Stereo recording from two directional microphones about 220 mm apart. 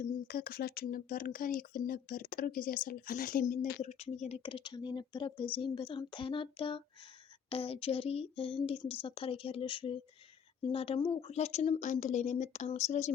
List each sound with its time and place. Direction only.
0.0 s speech: 40° left (ahead or behind)